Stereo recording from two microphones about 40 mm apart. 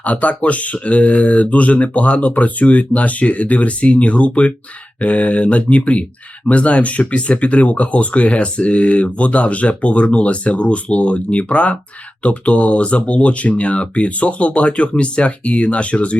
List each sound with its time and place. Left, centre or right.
0.0 s speech: left